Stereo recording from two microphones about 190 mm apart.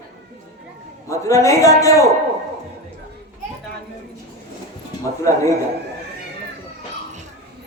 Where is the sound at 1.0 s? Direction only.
15° left (ahead or behind).